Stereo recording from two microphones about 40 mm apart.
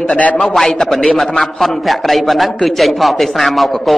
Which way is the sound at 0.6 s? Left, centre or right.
Centre.